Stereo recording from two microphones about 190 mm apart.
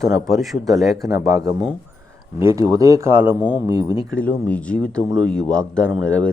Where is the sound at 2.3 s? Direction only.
15° right (ahead or behind).